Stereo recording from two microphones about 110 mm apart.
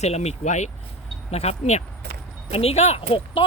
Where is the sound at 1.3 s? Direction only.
75° left (ahead or behind).